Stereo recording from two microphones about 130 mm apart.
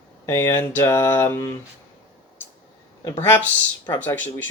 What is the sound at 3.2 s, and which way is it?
Speech, 15° left (ahead or behind).